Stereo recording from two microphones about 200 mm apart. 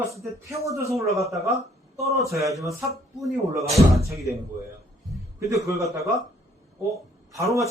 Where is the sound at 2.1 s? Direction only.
15° right (ahead or behind).